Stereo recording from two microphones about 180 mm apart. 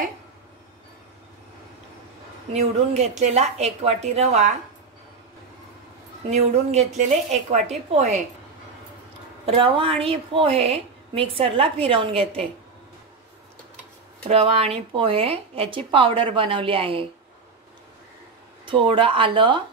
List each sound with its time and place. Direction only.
2.5 s a woman's voice: 40° right (ahead or behind)
6.3 s a woman's voice: 35° right (ahead or behind)
9.5 s a woman's voice: 30° right (ahead or behind)
14.2 s a woman's voice: 30° right (ahead or behind)
18.7 s speech: 30° right (ahead or behind)